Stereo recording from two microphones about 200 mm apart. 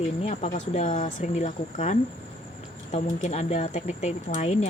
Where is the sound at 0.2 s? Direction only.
35° left (ahead or behind).